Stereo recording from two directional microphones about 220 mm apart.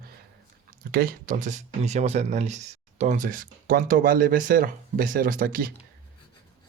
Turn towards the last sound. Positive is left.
turn(degrees=-40)  # may be behind; listen again after turning